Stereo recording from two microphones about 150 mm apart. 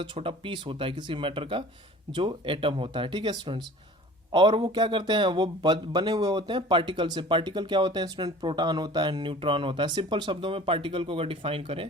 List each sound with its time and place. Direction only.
0.0 s speech: 35° right (ahead or behind)